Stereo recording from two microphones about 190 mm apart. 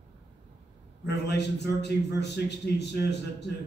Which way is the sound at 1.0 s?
60° left (ahead or behind).